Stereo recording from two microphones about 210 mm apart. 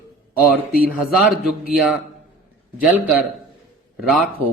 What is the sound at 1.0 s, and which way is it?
A man's voice, centre (ahead or behind).